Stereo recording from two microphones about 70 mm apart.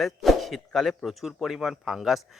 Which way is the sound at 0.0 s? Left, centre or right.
Centre.